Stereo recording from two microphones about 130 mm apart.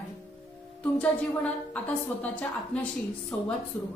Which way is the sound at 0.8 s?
10° left (ahead or behind).